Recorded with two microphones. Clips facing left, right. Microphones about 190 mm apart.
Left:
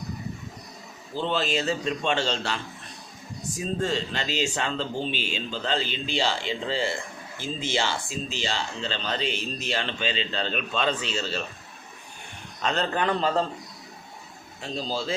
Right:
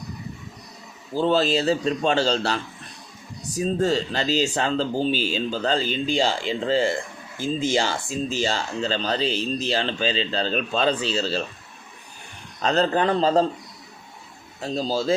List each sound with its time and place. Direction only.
1.1 s speech: 40° right (ahead or behind)
12.6 s speech: 35° right (ahead or behind)
14.6 s speech: 40° right (ahead or behind)